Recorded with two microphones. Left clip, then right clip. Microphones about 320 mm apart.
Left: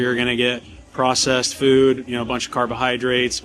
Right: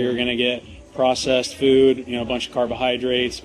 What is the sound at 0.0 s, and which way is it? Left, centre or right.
Speech, left.